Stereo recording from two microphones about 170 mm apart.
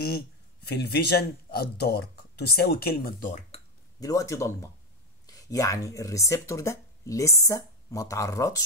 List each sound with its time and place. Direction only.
0.7 s speech: 70° left (ahead or behind); by 3.6 s 45° left (ahead or behind)
4.0 s speech: 20° left (ahead or behind)